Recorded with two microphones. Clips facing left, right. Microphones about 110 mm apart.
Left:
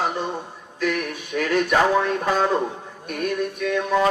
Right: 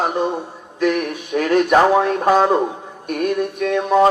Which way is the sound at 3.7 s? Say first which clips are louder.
Right 6 dB; 35° right (ahead or behind).